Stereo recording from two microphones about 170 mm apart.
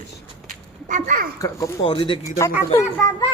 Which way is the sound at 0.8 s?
50° right (ahead or behind).